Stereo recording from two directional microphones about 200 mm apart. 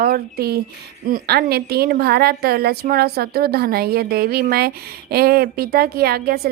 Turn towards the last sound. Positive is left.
turn(degrees=-50)  # may be behind; listen again after turning